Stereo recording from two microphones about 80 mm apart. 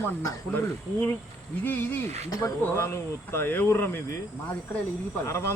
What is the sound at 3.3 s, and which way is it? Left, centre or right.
Speech, left.